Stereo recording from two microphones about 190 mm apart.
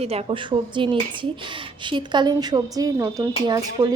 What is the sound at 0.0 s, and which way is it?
A woman's voice, 30° right (ahead or behind).